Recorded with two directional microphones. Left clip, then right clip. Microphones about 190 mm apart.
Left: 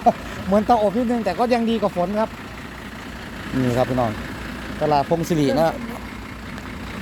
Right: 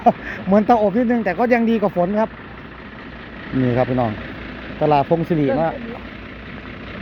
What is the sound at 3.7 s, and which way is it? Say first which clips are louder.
Speech: even; 20° right (ahead or behind).